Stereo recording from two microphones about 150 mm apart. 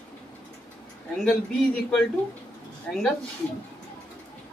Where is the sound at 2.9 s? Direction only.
5° left (ahead or behind).